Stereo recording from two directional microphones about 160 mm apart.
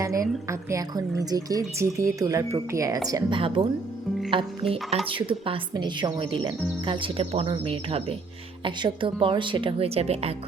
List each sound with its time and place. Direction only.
0.0 s speech: 20° right (ahead or behind); by 10.3 s 40° right (ahead or behind)